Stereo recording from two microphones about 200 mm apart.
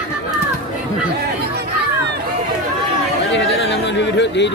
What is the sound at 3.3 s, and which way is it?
Chatter, 60° left (ahead or behind).